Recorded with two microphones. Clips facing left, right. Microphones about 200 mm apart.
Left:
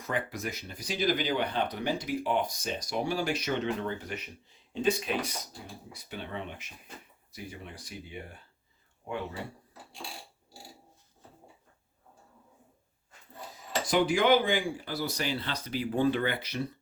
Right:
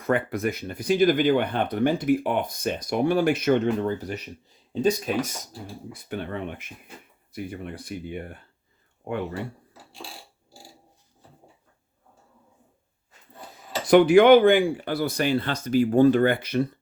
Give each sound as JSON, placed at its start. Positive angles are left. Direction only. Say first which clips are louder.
{"t": 0.0, "sound": "speech", "louder": "right 9 dB", "side_deg": -60}
{"t": 3.8, "sound": "speech", "louder": "right 7 dB", "side_deg": -40}
{"t": 13.8, "sound": "speech", "louder": "right 11 dB", "side_deg": -65}